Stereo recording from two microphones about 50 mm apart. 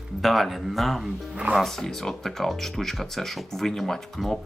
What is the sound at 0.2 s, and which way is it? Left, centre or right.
Speech, centre.